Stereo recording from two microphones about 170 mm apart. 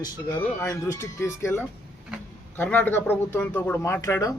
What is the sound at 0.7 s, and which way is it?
A man's voice, 15° left (ahead or behind).